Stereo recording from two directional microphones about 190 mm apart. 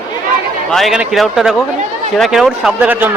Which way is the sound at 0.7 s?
Centre (ahead or behind).